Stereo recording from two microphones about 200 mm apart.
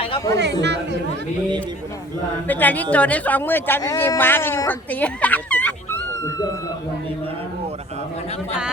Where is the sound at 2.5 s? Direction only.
10° left (ahead or behind).